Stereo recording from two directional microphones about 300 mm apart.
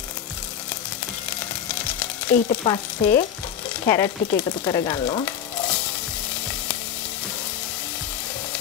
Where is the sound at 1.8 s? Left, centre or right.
Centre.